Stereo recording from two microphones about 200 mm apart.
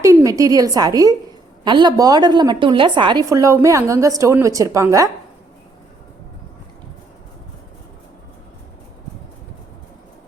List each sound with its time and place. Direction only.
0.0 s a woman's voice: 15° right (ahead or behind)